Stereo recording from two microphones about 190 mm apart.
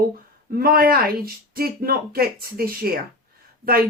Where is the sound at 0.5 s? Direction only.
50° right (ahead or behind).